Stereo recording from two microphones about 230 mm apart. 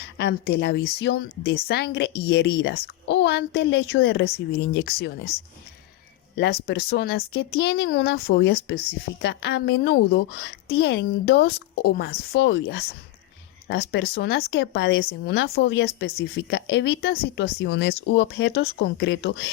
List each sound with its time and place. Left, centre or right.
0.2 s speech: left